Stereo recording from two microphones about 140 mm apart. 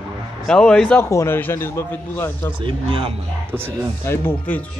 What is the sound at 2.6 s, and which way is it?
Speech, 40° right (ahead or behind).